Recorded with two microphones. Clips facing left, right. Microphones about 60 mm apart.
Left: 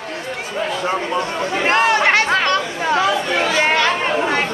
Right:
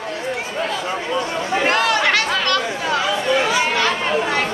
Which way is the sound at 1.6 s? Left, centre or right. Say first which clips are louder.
Left 3 dB; left.